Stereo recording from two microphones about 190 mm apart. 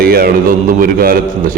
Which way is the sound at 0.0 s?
50° right (ahead or behind).